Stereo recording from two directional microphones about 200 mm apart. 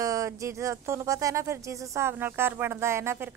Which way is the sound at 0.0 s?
15° right (ahead or behind).